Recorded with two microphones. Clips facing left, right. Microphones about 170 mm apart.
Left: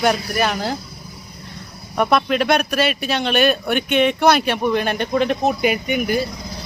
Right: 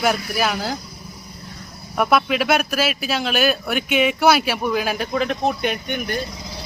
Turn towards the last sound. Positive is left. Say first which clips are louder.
# left 5 dB
turn(degrees=5)  # may be behind; listen again after turning